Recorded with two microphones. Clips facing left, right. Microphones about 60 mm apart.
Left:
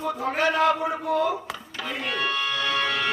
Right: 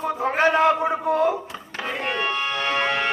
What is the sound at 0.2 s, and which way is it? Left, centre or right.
A man's voice, right.